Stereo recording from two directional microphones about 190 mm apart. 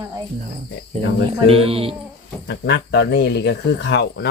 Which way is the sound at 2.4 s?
65° left (ahead or behind).